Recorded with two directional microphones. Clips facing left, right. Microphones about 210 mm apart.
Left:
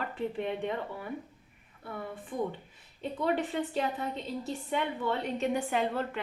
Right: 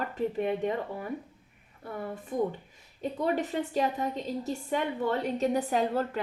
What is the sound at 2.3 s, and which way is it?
A woman's voice, 45° right (ahead or behind).